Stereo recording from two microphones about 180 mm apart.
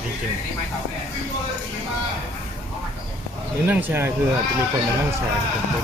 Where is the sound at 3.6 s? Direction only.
10° right (ahead or behind).